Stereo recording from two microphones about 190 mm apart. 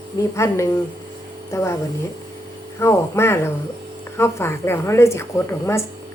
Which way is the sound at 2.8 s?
15° left (ahead or behind).